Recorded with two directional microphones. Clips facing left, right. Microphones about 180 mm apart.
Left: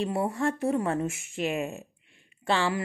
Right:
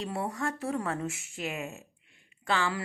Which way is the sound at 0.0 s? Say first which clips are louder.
Left 6 dB; 25° left (ahead or behind).